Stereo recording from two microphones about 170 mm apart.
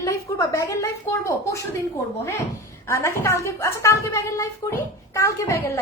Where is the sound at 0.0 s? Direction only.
15° left (ahead or behind).